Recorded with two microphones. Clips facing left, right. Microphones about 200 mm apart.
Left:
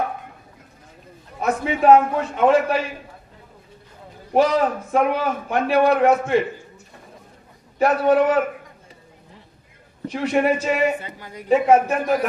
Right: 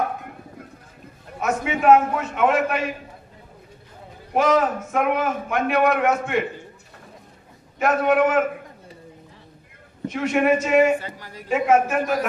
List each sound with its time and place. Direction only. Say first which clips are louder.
1.4 s a man's voice: left 2 dB; 35° left (ahead or behind)
4.4 s a man's voice: left 1 dB; 35° left (ahead or behind)
7.8 s a man's voice: left 2 dB; 35° left (ahead or behind)
10.1 s a man's voice: even; 35° left (ahead or behind)
11.0 s speech: even; 20° left (ahead or behind)
11.4 s a man's voice: left 3 dB; 35° left (ahead or behind)